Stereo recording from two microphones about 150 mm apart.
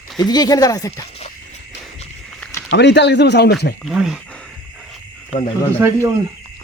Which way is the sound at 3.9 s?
5° right (ahead or behind).